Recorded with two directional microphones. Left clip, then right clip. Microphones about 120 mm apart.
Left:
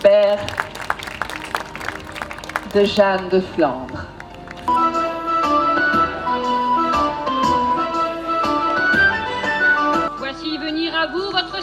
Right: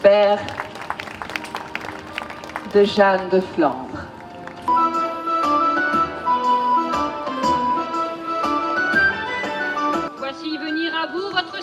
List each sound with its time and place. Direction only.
0.0 s speech: 40° right (ahead or behind)
2.7 s speech: 45° right (ahead or behind)
4.7 s music: 40° right (ahead or behind)
10.9 s a sound: 40° right (ahead or behind)